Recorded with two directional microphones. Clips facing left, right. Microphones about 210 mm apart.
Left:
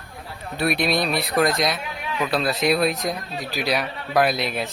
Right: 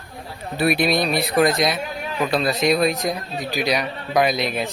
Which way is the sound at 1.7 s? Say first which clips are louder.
Right 3 dB; 40° right (ahead or behind).